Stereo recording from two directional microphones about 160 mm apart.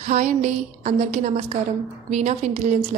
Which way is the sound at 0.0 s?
50° right (ahead or behind).